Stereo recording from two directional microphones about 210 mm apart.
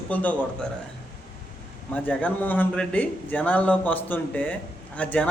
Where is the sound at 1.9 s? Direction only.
5° left (ahead or behind).